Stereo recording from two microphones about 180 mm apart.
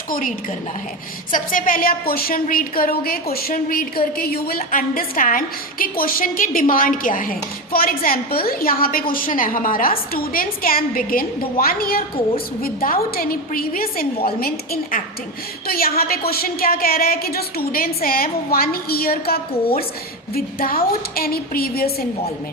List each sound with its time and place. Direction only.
0.1 s a woman's voice: 50° left (ahead or behind)